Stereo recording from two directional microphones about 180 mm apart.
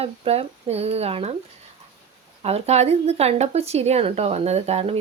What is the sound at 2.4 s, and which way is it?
Speech, 35° right (ahead or behind).